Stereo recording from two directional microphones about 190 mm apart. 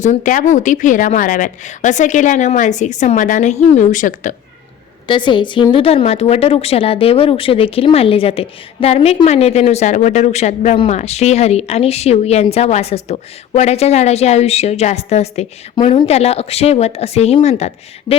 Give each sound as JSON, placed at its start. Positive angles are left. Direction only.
{"t": 0.0, "sound": "a woman's voice", "side_deg": 40}
{"t": 5.0, "sound": "a woman's voice", "side_deg": 25}